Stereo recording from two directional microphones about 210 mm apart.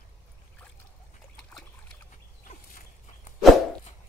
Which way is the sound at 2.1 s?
35° left (ahead or behind).